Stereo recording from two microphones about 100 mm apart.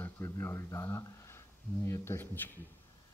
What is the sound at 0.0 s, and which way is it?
Speech, 25° left (ahead or behind).